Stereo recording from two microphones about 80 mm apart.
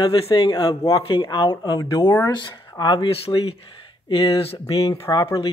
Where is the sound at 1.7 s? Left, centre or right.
Left.